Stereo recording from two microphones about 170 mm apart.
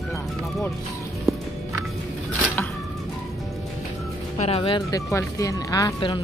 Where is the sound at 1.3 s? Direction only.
Centre (ahead or behind).